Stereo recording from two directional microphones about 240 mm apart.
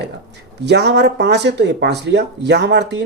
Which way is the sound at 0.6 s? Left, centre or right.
Right.